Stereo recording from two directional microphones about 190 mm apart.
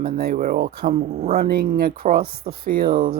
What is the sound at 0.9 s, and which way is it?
Speech, 35° right (ahead or behind).